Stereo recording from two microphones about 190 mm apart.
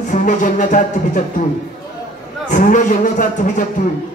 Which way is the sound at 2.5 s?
45° left (ahead or behind).